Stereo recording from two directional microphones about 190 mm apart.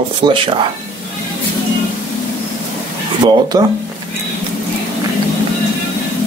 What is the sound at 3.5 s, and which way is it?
Speech, 20° right (ahead or behind).